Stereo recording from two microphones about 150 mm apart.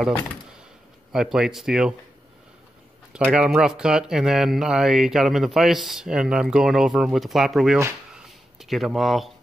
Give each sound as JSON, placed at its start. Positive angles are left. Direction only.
{"t": 1.1, "sound": "speech", "side_deg": -5}
{"t": 3.1, "sound": "speech", "side_deg": -5}
{"t": 8.1, "sound": "a sound", "side_deg": -5}